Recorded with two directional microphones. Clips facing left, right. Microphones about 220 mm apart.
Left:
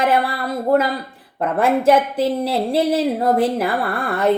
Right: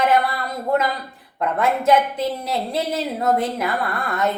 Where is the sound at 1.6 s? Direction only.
30° left (ahead or behind).